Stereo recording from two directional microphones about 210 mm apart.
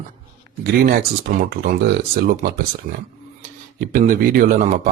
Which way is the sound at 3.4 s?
40° right (ahead or behind).